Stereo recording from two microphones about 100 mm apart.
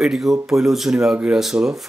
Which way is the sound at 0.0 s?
5° right (ahead or behind).